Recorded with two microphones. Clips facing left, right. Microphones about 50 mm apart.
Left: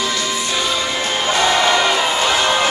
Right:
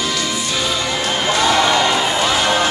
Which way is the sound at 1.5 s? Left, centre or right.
Left.